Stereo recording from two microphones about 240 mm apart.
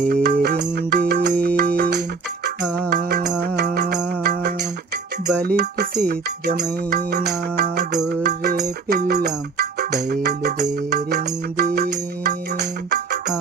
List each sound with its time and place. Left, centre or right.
0.1 s music: right
2.6 s music: centre
2.9 s music: right